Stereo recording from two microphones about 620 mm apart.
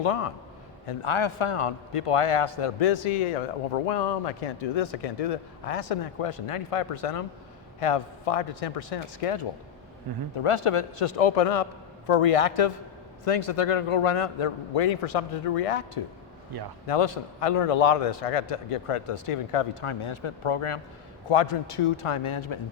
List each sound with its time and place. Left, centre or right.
0.0 s a man's voice: left
16.8 s a man's voice: left